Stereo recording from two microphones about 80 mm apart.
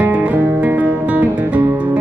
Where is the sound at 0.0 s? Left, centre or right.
Centre.